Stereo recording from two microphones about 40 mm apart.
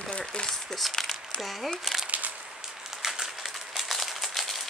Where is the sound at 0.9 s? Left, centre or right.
Centre.